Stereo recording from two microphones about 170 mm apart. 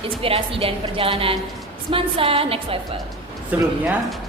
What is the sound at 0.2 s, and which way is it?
A woman's voice, 35° right (ahead or behind).